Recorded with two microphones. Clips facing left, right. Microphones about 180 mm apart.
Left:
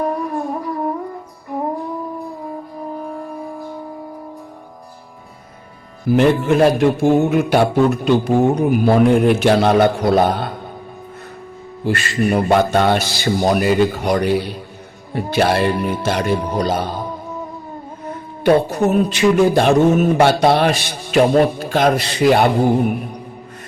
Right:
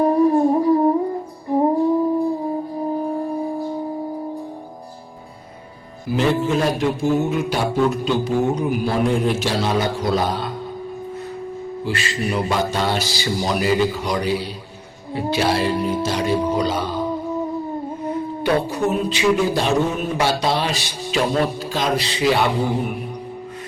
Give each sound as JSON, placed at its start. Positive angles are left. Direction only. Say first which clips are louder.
{"t": 0.0, "sound": "music", "louder": "right 7 dB", "side_deg": -30}
{"t": 3.0, "sound": "wind instrument", "louder": "right 5 dB", "side_deg": -30}
{"t": 6.1, "sound": "speech", "louder": "left 5 dB", "side_deg": 60}
{"t": 11.9, "sound": "speech", "louder": "left 7 dB", "side_deg": 50}
{"t": 16.6, "sound": "speech", "louder": "left 2 dB", "side_deg": 45}
{"t": 18.4, "sound": "speech", "louder": "left 6 dB", "side_deg": 50}